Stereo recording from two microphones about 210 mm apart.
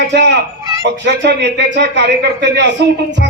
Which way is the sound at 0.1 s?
55° right (ahead or behind).